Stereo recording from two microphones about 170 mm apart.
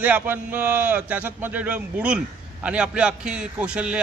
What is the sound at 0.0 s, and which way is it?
A man's voice, 10° right (ahead or behind).